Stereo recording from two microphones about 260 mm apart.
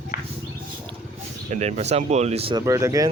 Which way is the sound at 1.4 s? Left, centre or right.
Right.